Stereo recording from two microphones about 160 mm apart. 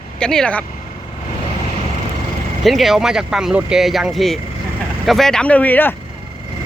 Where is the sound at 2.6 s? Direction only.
Centre (ahead or behind).